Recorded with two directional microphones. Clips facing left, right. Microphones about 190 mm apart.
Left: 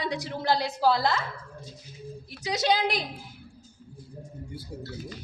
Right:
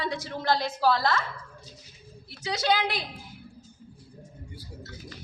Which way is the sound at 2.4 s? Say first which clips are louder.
Left 1 dB; 20° left (ahead or behind).